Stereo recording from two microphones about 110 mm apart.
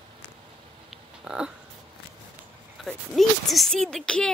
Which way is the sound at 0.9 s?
5° right (ahead or behind).